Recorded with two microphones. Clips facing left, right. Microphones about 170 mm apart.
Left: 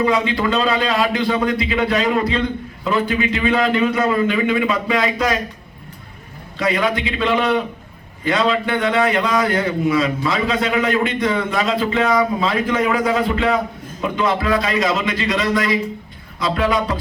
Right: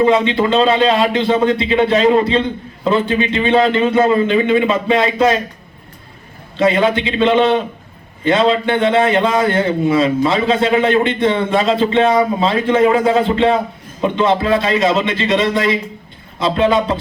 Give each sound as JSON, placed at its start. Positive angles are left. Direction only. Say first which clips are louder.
{"t": 0.0, "sound": "a man's voice", "louder": "right 5 dB", "side_deg": -25}
{"t": 6.6, "sound": "a man's voice", "louder": "right 5 dB", "side_deg": -25}